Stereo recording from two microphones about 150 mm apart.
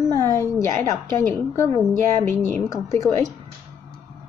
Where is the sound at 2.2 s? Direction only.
15° left (ahead or behind).